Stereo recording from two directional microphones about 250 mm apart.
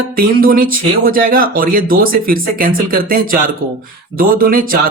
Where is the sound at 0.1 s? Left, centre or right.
Right.